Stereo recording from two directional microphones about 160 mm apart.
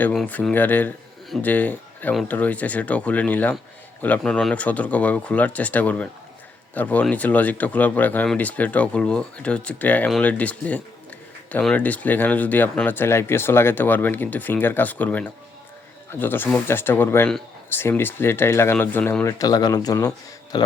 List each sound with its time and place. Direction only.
0.0 s speech: 5° left (ahead or behind); by 20.7 s 25° left (ahead or behind)